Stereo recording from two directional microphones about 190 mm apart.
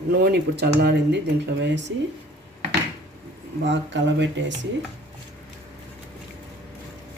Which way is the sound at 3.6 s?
70° right (ahead or behind).